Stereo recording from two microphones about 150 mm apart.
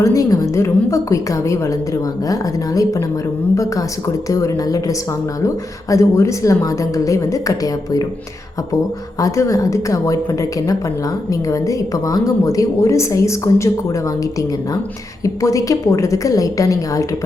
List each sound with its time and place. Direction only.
0.0 s a woman's voice: 20° left (ahead or behind)
9.2 s a woman's voice: 20° left (ahead or behind)
11.3 s a woman's voice: 20° left (ahead or behind)
15.2 s a woman's voice: 20° left (ahead or behind)